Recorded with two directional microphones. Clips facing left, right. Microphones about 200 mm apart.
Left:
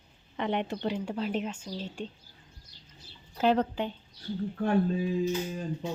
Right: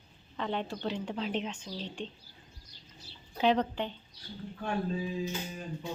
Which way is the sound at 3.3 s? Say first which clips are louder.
Left 2 dB; 5° left (ahead or behind).